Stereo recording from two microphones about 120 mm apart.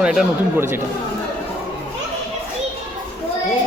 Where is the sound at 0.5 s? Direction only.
20° right (ahead or behind).